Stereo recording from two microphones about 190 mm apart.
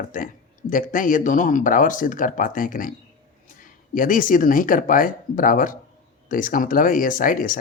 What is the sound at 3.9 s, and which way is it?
Speech, 45° left (ahead or behind).